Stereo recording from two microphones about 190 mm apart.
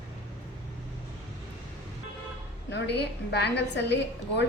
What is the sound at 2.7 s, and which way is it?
A woman's voice, 60° left (ahead or behind).